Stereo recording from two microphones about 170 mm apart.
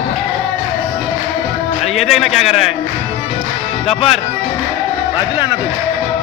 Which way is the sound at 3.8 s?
35° left (ahead or behind).